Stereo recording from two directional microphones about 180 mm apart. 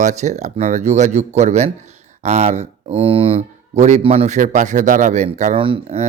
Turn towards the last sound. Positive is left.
turn(degrees=-30)  # may be behind; listen again after turning